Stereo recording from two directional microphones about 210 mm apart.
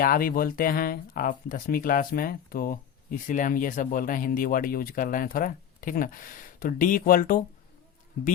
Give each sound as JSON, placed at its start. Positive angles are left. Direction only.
{"t": 0.0, "sound": "speech", "side_deg": 45}